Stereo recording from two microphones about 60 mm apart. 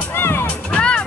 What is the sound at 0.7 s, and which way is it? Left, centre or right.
Music, centre.